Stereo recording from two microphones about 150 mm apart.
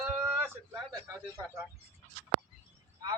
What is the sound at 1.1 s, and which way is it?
Speech, 20° right (ahead or behind).